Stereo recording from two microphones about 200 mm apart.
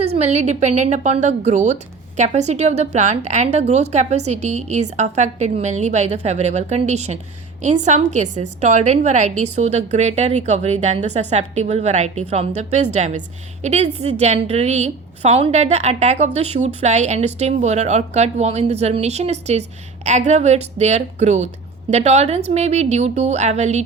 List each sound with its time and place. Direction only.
0.0 s a woman's voice: 30° right (ahead or behind)